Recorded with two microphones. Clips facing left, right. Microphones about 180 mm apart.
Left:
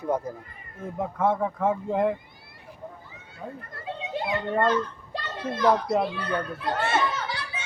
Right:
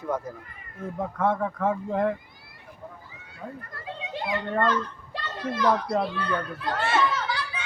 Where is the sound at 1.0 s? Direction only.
5° left (ahead or behind).